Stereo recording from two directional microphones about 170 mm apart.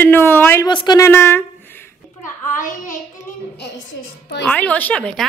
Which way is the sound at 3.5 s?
80° left.